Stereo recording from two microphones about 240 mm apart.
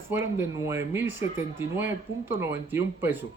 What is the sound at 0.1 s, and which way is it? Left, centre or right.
Speech, centre.